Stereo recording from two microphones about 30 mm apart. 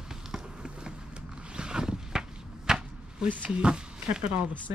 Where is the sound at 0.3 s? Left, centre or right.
Right.